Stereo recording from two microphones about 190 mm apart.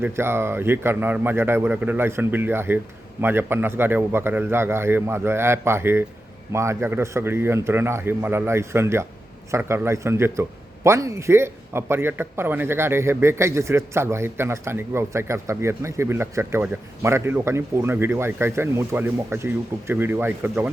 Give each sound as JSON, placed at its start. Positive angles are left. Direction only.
{"t": 0.0, "sound": "speech", "side_deg": -10}